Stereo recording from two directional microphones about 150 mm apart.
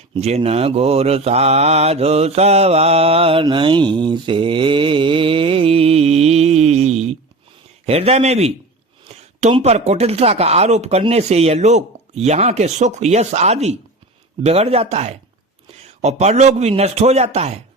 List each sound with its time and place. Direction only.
0.1 s mantra: 45° right (ahead or behind)